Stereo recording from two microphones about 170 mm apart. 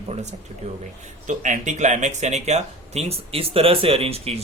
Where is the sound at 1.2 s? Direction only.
45° right (ahead or behind).